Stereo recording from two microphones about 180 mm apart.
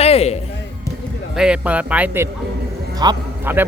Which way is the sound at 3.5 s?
10° right (ahead or behind).